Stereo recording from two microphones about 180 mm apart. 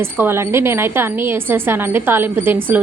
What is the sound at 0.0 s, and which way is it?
A woman's voice, 15° right (ahead or behind).